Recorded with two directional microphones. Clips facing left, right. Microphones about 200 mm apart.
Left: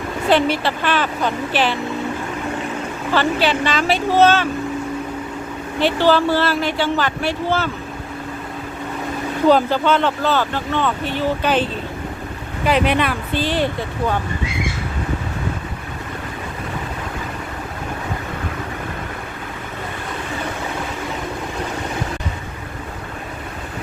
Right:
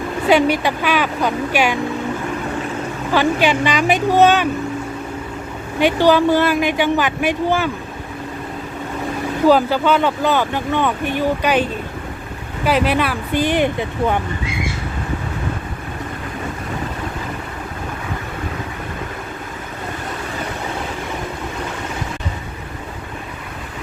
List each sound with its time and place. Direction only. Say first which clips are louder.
0.3 s speech: right 2 dB; 15° right (ahead or behind)
3.1 s speech: right 2 dB; 15° right (ahead or behind)
5.8 s speech: right 2 dB; 15° right (ahead or behind)
9.5 s a woman's voice: right 1 dB; 10° right (ahead or behind)
13.4 s speech: right 4 dB; 15° right (ahead or behind)